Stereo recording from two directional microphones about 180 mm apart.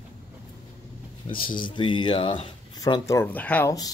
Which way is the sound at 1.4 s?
25° left (ahead or behind).